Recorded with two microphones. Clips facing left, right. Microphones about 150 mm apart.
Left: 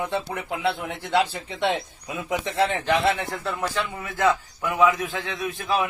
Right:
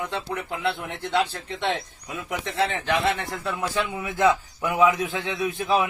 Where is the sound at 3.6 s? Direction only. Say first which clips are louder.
Right 1 dB; 10° right (ahead or behind).